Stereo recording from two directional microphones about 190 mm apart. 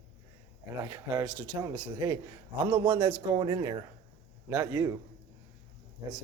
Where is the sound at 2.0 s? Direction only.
20° right (ahead or behind).